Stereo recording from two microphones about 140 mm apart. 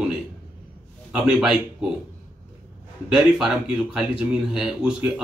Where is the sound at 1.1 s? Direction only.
5° right (ahead or behind).